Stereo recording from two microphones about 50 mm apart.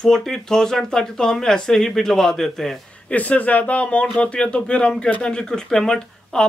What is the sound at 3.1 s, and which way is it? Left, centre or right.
Speech, left.